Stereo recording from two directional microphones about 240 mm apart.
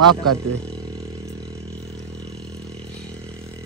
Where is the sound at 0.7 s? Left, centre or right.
Centre.